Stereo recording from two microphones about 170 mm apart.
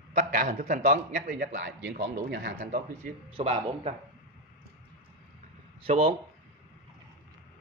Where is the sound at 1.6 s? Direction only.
90° right.